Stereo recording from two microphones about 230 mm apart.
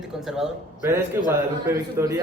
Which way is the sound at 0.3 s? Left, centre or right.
Centre.